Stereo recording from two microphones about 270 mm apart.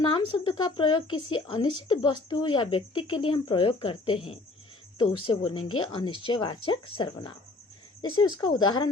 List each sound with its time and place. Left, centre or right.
0.0 s speech: centre
8.4 s speech: centre